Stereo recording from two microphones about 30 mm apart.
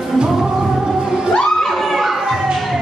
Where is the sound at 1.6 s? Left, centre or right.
Centre.